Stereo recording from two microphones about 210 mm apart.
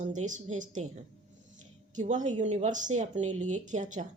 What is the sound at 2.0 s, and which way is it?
A woman's voice, 35° right (ahead or behind).